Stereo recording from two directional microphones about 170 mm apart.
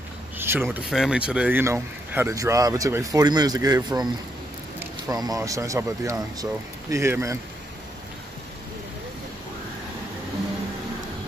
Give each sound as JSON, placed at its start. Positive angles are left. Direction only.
{"t": 0.4, "sound": "speech", "side_deg": -15}
{"t": 0.8, "sound": "speech", "side_deg": -5}